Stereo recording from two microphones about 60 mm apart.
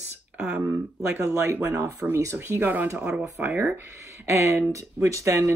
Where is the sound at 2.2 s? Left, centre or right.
Right.